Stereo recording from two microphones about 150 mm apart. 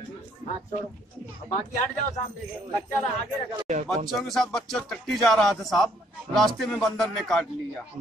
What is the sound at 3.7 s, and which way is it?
Speech, 50° right (ahead or behind).